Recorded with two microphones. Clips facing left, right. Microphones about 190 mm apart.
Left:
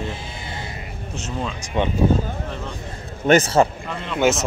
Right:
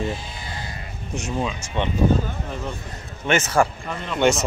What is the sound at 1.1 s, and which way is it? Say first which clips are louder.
Speech: right 3 dB; 15° right (ahead or behind).